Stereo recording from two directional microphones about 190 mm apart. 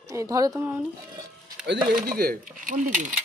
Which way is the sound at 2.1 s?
50° right (ahead or behind).